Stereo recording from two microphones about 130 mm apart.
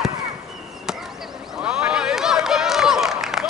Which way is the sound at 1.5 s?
5° right (ahead or behind).